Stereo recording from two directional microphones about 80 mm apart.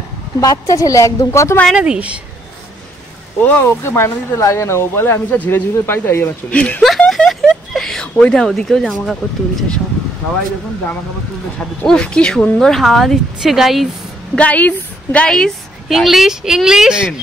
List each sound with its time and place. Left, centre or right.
0.4 s a woman's voice: left
1.8 s speech: centre
3.4 s speech: left
6.5 s speech: centre
6.8 s speech: centre
11.8 s speech: centre
14.3 s speech: centre
15.9 s speech: centre